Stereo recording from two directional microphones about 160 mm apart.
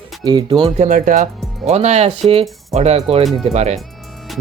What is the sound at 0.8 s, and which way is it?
Speech, 55° right (ahead or behind).